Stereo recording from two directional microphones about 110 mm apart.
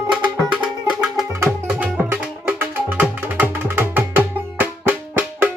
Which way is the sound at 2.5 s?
15° right (ahead or behind).